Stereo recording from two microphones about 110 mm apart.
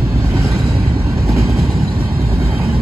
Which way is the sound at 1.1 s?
Centre (ahead or behind).